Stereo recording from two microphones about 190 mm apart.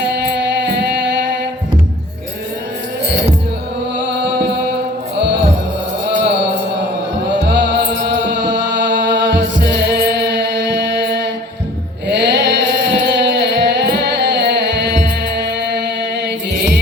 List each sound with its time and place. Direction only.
0.6 s music: 65° right (ahead or behind)
7.3 s music: 70° right (ahead or behind)